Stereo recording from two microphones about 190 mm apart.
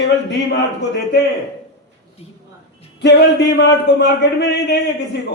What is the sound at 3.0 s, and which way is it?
A man's voice, 60° left (ahead or behind).